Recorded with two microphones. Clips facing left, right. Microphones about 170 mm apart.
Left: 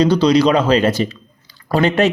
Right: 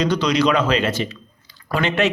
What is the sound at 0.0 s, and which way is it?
Speech, 30° left (ahead or behind).